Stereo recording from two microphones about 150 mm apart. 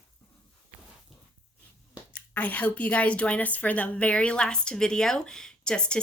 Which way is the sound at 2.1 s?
10° left (ahead or behind).